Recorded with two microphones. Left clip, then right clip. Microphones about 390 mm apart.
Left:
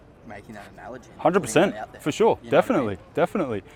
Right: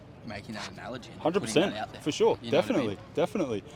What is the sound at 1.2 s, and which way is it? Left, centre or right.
A man's voice, left.